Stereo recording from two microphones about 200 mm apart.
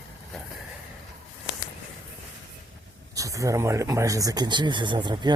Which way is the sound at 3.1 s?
15° right (ahead or behind).